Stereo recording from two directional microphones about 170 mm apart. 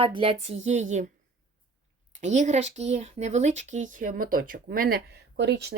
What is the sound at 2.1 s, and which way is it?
Speech, 45° right (ahead or behind).